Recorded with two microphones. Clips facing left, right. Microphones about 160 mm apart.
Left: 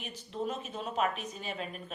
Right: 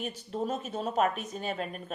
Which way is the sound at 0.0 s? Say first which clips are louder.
Right 3 dB; 40° right (ahead or behind).